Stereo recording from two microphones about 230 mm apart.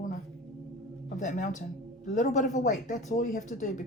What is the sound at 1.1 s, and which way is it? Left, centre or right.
Speech, left.